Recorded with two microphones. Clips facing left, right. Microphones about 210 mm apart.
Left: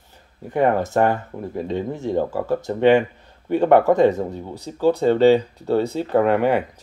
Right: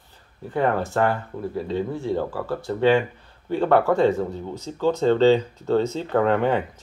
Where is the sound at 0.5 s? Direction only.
15° left (ahead or behind).